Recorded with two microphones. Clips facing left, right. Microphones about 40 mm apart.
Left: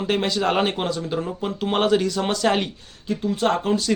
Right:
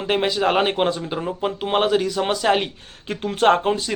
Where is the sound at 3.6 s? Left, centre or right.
Right.